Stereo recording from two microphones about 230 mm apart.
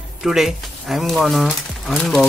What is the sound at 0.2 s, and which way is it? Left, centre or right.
Speech, centre.